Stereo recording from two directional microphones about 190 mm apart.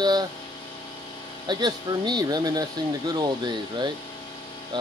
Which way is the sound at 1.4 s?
25° right (ahead or behind).